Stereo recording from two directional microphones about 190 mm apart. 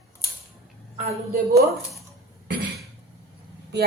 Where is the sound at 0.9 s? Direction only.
35° right (ahead or behind).